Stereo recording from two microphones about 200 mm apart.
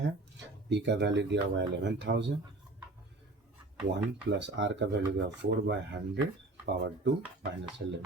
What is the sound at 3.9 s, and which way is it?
Speech, 60° right (ahead or behind).